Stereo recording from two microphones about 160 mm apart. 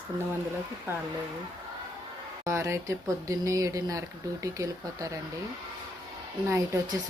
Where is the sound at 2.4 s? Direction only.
15° right (ahead or behind).